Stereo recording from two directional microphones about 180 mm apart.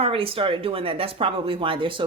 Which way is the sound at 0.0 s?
30° right (ahead or behind).